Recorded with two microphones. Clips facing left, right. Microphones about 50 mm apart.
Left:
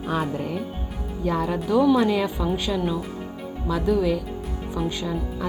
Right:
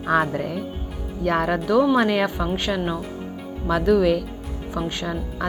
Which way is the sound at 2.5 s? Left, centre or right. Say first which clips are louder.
Right 1 dB; right.